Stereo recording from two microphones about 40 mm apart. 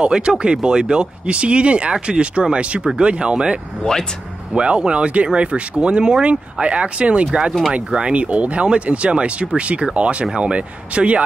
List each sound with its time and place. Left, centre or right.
0.0 s speech: right
4.6 s speech: right